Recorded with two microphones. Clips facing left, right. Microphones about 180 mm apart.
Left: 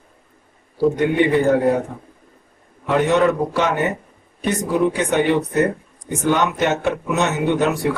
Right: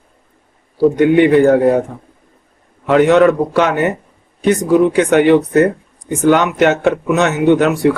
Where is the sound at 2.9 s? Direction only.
90° right.